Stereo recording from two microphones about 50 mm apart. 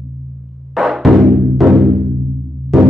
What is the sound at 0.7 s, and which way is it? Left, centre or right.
Music, centre.